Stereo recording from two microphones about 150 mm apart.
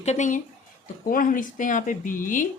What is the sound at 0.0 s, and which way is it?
Speech, 50° left (ahead or behind).